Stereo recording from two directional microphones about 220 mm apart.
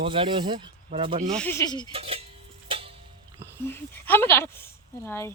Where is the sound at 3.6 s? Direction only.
10° left (ahead or behind).